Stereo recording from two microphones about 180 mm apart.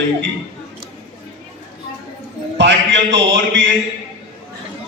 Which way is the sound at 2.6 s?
80° right.